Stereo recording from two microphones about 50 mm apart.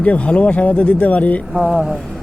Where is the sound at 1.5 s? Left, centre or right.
Centre.